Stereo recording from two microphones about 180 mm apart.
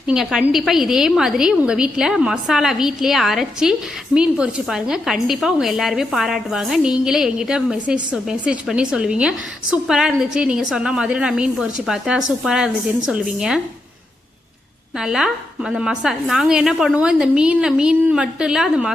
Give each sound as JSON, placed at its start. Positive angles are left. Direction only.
{"t": 0.1, "sound": "a woman's voice", "side_deg": -5}
{"t": 14.9, "sound": "a woman's voice", "side_deg": -5}